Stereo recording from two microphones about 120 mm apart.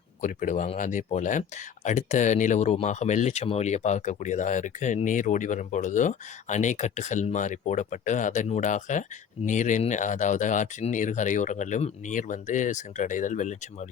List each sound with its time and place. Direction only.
0.2 s speech: 90° left